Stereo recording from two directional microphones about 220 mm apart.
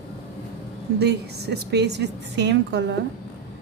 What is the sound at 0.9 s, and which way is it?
A woman's voice, 50° right (ahead or behind).